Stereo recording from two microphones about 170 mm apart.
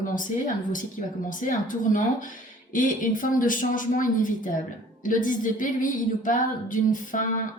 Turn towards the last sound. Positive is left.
turn(degrees=50)  # may be behind; listen again after turning